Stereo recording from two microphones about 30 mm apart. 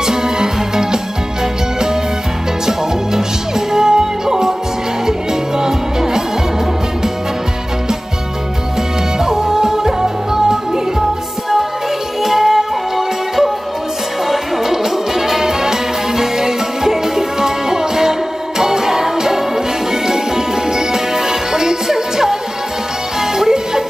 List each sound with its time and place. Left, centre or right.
0.0 s music: centre
2.6 s music: centre
9.2 s music: centre
12.2 s music: centre